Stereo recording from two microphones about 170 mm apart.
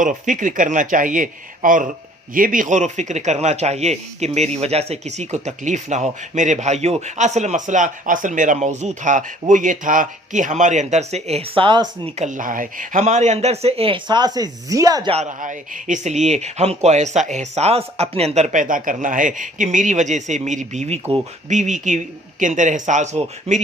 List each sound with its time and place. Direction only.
0.0 s speech: 50° right (ahead or behind); by 12.1 s 30° right (ahead or behind)
12.1 s speech: 45° right (ahead or behind); by 15.1 s 20° right (ahead or behind)
15.1 s speech: 45° right (ahead or behind)